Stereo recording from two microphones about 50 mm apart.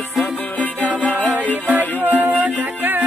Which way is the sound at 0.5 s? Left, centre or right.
Left.